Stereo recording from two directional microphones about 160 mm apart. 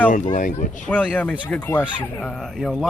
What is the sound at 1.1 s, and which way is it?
Speech, 10° left (ahead or behind).